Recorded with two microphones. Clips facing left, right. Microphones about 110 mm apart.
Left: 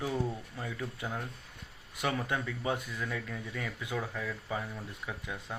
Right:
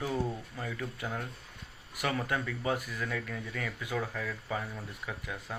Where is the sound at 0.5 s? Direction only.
15° left (ahead or behind).